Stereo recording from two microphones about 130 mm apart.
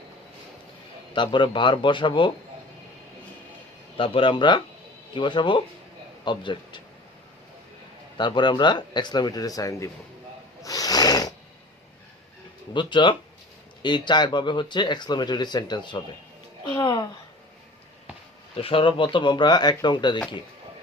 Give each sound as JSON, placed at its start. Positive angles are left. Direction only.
{"t": 1.1, "sound": "speech", "side_deg": 35}
{"t": 3.9, "sound": "a man's voice", "side_deg": 40}
{"t": 8.2, "sound": "speech", "side_deg": 35}
{"t": 10.6, "sound": "snoring", "side_deg": 30}
{"t": 12.7, "sound": "speech", "side_deg": 40}
{"t": 18.5, "sound": "speech", "side_deg": 45}